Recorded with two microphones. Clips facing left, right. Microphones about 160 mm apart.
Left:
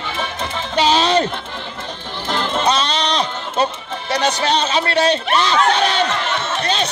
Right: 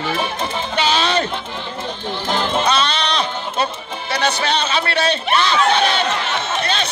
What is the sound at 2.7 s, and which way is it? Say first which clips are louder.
Music: left 1 dB; 35° left (ahead or behind).